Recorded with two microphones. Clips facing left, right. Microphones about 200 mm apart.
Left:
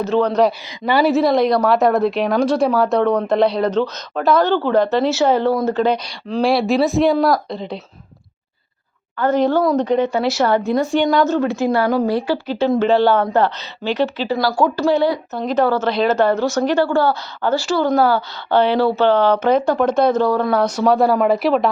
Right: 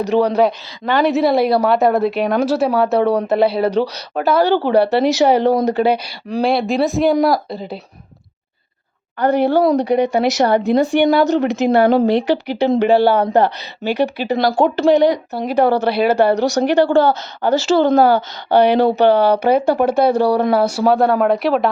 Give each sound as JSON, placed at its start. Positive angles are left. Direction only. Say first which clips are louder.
{"t": 0.0, "sound": "a woman's voice", "louder": "right 1 dB", "side_deg": -15}
{"t": 0.9, "sound": "a woman's voice", "louder": "even", "side_deg": 5}
{"t": 6.4, "sound": "speech", "louder": "left 1 dB", "side_deg": 0}
{"t": 9.1, "sound": "a woman's voice", "louder": "right 2 dB", "side_deg": -15}